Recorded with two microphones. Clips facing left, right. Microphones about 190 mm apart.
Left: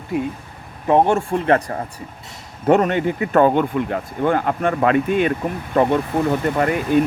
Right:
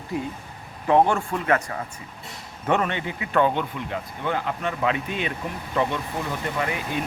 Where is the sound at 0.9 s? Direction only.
20° left (ahead or behind).